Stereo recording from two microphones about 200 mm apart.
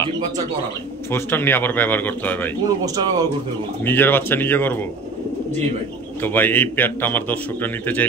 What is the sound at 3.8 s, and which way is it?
A man's voice, 10° left (ahead or behind).